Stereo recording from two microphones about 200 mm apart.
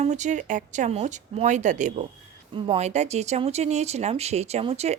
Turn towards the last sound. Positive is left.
turn(degrees=-30)  # may be behind; listen again after turning